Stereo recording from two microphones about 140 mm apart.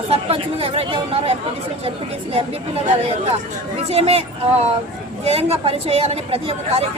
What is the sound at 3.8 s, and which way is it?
Speech, 45° right (ahead or behind).